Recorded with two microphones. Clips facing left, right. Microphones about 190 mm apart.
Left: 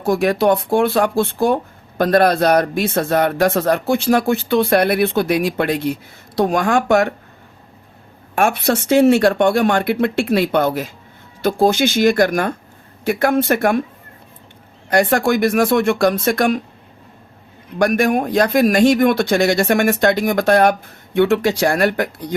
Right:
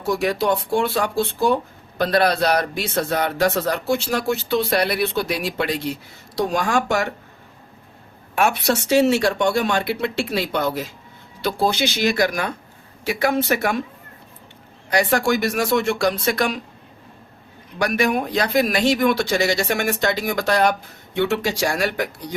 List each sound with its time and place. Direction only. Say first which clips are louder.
0.0 s a man's voice: left 5 dB; 55° left (ahead or behind)
8.4 s a man's voice: left 3 dB; 50° left (ahead or behind)
14.8 s speech: left 4 dB; 55° left (ahead or behind)
17.7 s a man's voice: left 5 dB; 50° left (ahead or behind)